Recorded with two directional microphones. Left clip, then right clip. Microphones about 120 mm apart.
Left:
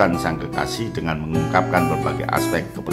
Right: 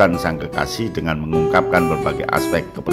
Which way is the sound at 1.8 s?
Centre (ahead or behind).